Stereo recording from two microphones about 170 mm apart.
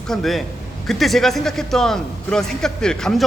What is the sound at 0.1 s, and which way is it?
A man's voice, centre (ahead or behind).